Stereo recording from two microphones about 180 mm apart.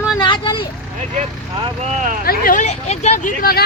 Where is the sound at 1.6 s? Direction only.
40° right (ahead or behind).